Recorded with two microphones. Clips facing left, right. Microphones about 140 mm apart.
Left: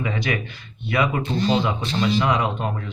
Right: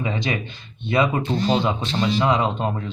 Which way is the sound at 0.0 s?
25° right (ahead or behind).